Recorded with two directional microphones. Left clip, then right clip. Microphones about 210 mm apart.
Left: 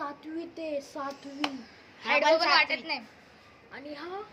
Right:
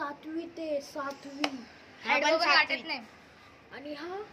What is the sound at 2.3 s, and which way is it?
Speech, 20° left (ahead or behind).